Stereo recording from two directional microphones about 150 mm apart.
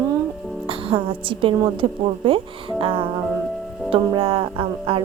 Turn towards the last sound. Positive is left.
turn(degrees=-35)  # may be behind; listen again after turning